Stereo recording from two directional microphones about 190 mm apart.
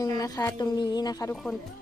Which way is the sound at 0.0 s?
20° left (ahead or behind).